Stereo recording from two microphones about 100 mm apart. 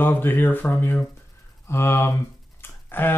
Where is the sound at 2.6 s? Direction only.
20° left (ahead or behind).